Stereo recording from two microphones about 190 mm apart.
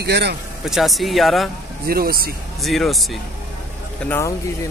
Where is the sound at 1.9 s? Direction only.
50° right (ahead or behind).